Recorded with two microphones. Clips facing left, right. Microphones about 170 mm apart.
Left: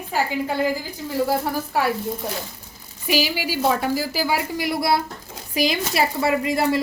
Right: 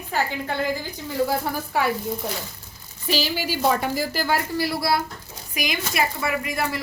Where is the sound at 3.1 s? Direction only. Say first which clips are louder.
Left 2 dB; 10° left (ahead or behind).